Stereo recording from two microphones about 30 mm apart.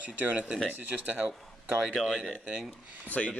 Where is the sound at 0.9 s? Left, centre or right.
Right.